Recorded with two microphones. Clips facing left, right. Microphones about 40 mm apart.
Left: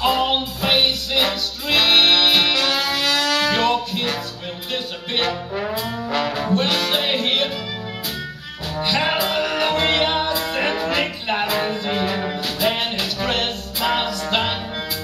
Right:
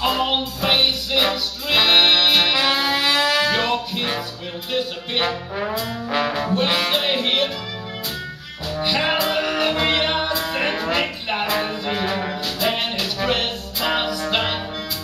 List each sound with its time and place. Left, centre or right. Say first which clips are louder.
0.0 s music: left 2 dB; centre
2.5 s music: right 1 dB; centre
3.4 s music: left 2 dB; centre
5.5 s trombone: even; centre
6.3 s brass instrument: left 1 dB; centre
6.9 s music: even; centre
8.7 s music: even; centre